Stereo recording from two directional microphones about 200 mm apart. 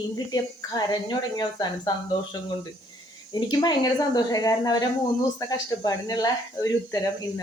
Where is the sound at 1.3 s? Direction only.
20° left (ahead or behind).